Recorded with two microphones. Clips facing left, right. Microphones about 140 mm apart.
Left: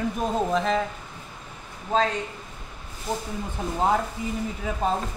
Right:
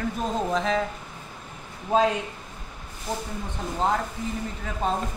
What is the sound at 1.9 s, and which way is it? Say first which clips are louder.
Speech: right 2 dB; 15° right (ahead or behind).